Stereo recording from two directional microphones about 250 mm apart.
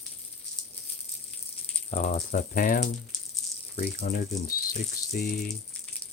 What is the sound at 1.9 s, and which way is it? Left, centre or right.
Speech, left.